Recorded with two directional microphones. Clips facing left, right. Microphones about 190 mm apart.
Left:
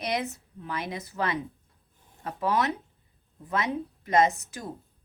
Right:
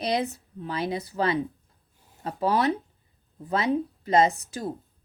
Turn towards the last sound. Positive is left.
turn(degrees=-30)  # may be behind; listen again after turning